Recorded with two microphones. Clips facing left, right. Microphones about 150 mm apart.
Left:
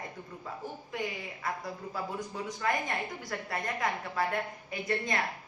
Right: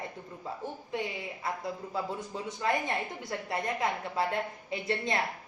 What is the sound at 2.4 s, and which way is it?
A woman's voice, 25° right (ahead or behind).